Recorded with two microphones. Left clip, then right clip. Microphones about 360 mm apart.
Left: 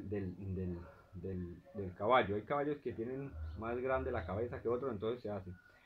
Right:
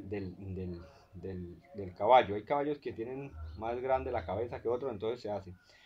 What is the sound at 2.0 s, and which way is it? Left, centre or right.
Speech, right.